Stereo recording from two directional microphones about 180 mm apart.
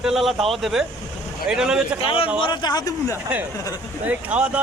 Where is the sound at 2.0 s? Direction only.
30° left (ahead or behind).